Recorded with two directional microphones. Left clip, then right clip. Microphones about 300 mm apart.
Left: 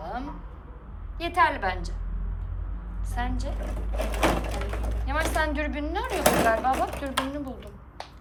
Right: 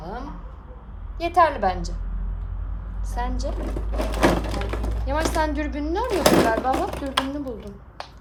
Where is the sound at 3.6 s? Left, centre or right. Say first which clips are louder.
Right 4 dB; right.